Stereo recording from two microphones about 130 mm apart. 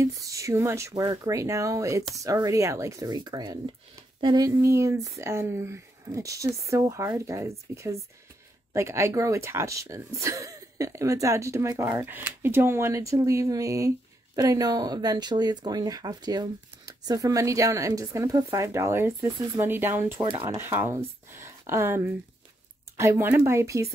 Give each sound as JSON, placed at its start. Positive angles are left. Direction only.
{"t": 0.0, "sound": "speech", "side_deg": -25}
{"t": 4.6, "sound": "speech", "side_deg": -20}
{"t": 20.2, "sound": "speech", "side_deg": -35}
{"t": 20.4, "sound": "speech", "side_deg": -20}